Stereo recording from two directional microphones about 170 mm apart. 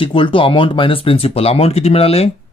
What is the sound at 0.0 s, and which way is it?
Speech, 30° left (ahead or behind).